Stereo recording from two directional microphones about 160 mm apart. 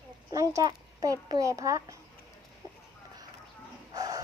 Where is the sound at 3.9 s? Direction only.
20° right (ahead or behind).